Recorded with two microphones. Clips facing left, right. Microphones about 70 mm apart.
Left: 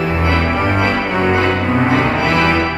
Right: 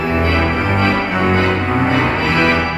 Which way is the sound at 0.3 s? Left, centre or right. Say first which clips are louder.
Even; centre.